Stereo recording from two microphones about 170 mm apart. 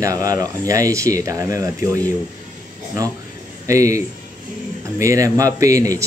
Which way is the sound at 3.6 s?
20° right (ahead or behind).